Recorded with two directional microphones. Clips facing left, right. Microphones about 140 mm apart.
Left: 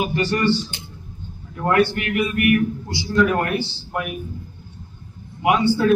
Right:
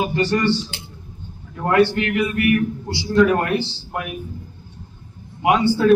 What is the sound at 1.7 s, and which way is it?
A man's voice, 25° right (ahead or behind).